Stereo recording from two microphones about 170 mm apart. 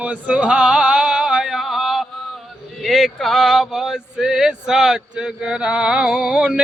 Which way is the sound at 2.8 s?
Centre (ahead or behind).